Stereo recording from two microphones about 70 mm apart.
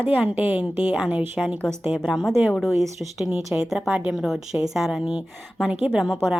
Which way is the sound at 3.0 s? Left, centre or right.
Centre.